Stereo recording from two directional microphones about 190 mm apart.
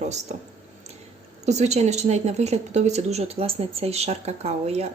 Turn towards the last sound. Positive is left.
turn(degrees=-35)  # may be behind; listen again after turning